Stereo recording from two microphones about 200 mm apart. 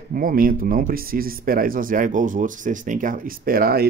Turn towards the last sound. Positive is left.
turn(degrees=-50)  # may be behind; listen again after turning